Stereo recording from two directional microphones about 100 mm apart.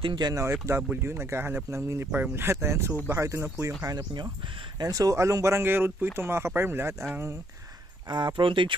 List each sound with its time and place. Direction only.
0.0 s speech: 50° right (ahead or behind)
0.5 s speech: 25° right (ahead or behind)
8.1 s speech: 50° right (ahead or behind)